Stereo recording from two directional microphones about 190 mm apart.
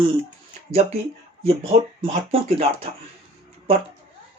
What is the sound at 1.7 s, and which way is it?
Speech, 30° right (ahead or behind).